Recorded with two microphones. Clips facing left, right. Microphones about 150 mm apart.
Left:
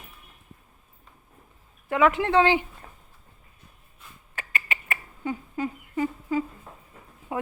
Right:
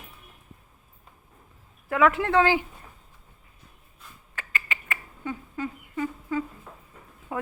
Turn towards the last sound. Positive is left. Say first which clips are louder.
# left 1 dB
turn(degrees=10)  # may be behind; listen again after turning